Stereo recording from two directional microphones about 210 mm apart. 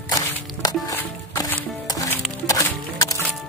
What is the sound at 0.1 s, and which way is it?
Music, 15° left (ahead or behind).